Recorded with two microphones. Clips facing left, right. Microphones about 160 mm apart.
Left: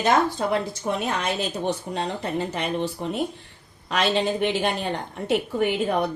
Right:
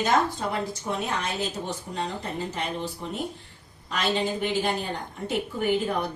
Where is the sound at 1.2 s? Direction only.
75° left (ahead or behind).